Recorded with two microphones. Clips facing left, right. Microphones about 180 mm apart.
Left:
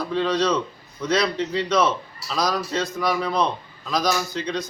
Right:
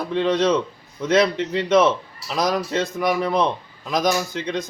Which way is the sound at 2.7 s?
55° right (ahead or behind).